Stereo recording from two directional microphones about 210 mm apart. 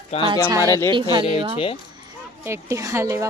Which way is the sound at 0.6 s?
15° left (ahead or behind).